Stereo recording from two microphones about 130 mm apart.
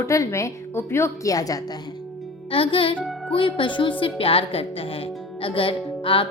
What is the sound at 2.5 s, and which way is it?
A woman's voice, 45° left (ahead or behind).